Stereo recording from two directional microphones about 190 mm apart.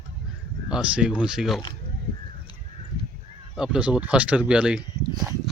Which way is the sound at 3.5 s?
5° right (ahead or behind).